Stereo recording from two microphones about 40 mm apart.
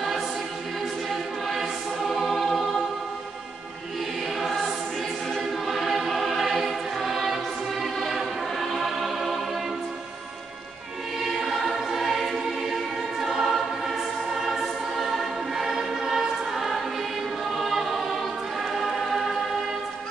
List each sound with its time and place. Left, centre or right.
1.5 s music: centre
4.4 s choir: centre
7.8 s music: centre
11.2 s choir: centre